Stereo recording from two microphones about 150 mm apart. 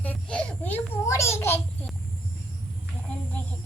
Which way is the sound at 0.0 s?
10° left (ahead or behind).